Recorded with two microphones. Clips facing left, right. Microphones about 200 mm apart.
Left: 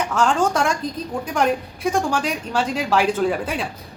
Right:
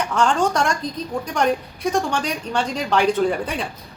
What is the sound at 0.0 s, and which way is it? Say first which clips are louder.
Speech: even; 5° left (ahead or behind).